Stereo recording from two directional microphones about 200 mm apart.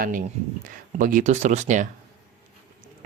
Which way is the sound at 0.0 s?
45° right (ahead or behind).